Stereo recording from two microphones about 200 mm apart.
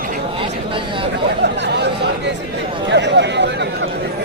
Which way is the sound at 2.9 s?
60° right (ahead or behind).